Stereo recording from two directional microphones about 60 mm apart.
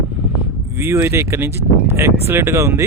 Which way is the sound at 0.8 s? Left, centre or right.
Right.